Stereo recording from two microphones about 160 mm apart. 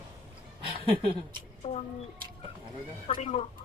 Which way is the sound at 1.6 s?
40° left (ahead or behind).